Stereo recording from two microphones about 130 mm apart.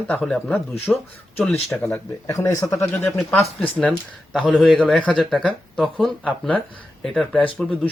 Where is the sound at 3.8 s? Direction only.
5° left (ahead or behind).